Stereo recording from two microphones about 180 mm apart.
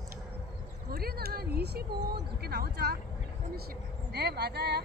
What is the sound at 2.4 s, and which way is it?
Speech, 60° right (ahead or behind).